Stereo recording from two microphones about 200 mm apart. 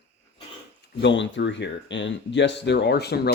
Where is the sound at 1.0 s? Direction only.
65° left (ahead or behind).